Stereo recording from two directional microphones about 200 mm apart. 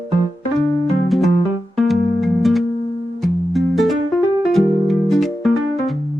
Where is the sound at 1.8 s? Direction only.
Centre (ahead or behind).